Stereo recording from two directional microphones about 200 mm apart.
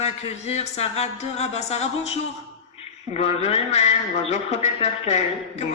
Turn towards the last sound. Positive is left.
turn(degrees=30)  # may be behind; listen again after turning